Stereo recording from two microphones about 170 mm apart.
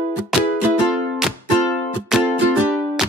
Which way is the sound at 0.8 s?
Centre (ahead or behind).